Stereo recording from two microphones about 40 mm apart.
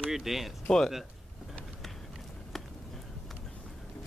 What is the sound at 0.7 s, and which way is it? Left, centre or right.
Speech, centre.